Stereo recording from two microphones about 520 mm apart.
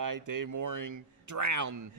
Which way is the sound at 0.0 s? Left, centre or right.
Right.